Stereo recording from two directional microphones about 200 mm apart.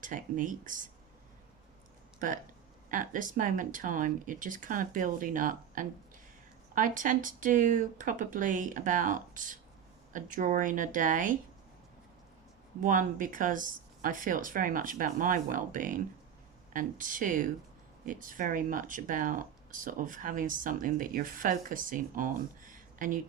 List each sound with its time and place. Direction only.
0.0 s speech: 40° right (ahead or behind)
2.1 s speech: 40° right (ahead or behind)
12.8 s speech: 40° right (ahead or behind)